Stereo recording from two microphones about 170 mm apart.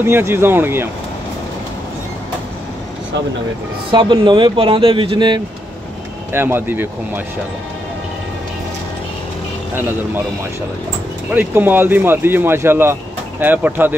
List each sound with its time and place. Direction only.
0.0 s speech: 15° right (ahead or behind)
3.9 s speech: 30° right (ahead or behind)
6.3 s speech: 15° right (ahead or behind)
11.3 s speech: 10° right (ahead or behind)